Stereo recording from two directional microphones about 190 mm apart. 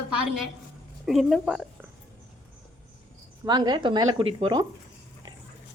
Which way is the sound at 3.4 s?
20° right (ahead or behind).